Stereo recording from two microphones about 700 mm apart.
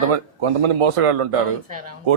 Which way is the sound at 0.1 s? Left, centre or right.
Right.